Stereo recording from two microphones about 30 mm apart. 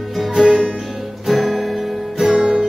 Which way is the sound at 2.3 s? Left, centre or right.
Right.